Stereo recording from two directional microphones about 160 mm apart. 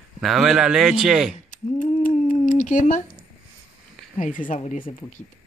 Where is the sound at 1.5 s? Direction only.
50° left (ahead or behind).